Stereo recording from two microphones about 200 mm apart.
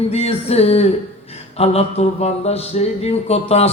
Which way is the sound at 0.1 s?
30° left (ahead or behind).